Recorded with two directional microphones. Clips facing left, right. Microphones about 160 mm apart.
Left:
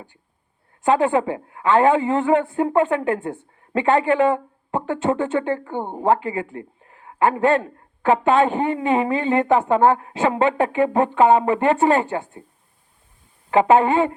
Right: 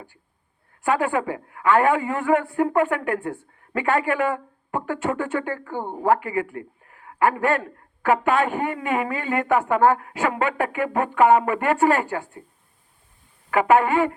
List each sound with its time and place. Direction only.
0.8 s a woman's voice: 25° left (ahead or behind)
13.5 s a woman's voice: 25° left (ahead or behind)